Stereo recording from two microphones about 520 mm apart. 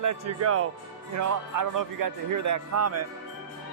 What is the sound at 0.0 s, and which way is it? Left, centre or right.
Speech, right.